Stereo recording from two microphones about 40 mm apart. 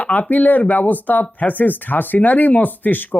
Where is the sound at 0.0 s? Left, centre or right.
Left.